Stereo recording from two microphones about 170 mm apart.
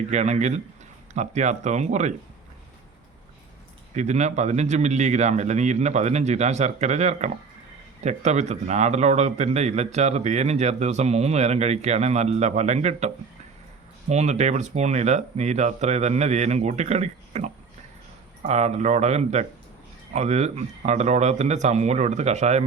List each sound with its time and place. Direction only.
0.1 s speech: 40° right (ahead or behind)
3.9 s a man's voice: 45° right (ahead or behind)